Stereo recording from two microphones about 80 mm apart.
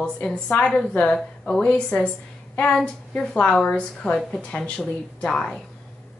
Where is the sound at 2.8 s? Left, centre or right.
Centre.